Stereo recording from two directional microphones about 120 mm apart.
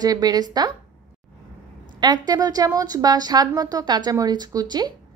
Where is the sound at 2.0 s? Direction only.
35° right (ahead or behind).